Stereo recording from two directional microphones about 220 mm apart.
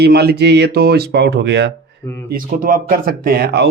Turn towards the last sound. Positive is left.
turn(degrees=-45)  # may be behind; listen again after turning